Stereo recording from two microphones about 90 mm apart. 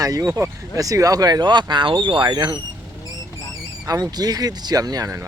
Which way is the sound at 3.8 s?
40° right (ahead or behind).